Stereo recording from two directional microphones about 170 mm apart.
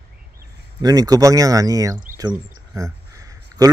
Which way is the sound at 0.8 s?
20° right (ahead or behind).